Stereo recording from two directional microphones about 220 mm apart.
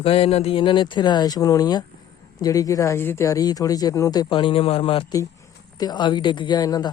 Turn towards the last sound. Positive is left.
turn(degrees=15)  # may be behind; listen again after turning